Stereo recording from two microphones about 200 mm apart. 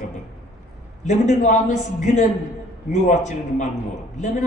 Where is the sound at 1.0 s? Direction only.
35° left (ahead or behind).